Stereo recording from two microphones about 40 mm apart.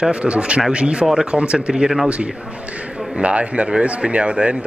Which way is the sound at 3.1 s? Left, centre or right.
Right.